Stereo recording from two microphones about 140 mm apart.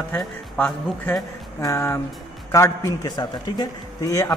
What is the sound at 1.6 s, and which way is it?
A man's voice, 20° left (ahead or behind).